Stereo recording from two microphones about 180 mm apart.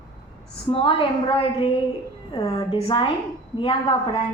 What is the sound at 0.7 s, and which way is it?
A woman's voice, 30° left (ahead or behind).